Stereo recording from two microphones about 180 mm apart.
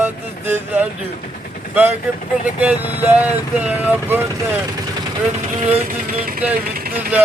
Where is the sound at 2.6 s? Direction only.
10° right (ahead or behind).